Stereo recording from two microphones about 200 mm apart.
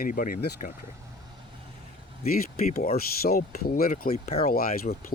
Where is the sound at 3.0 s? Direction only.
50° left (ahead or behind).